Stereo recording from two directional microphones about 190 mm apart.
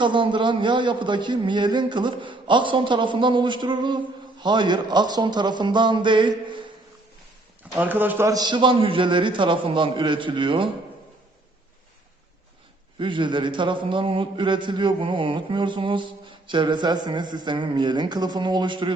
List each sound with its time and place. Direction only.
0.0 s a man's voice: 25° right (ahead or behind)
7.8 s a man's voice: 10° right (ahead or behind); by 10.7 s 25° right (ahead or behind)
13.0 s a man's voice: 25° right (ahead or behind)